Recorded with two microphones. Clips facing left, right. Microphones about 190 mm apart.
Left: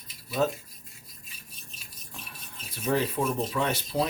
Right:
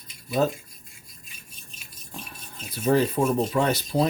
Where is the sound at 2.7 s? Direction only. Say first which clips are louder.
Right 6 dB; 35° right (ahead or behind).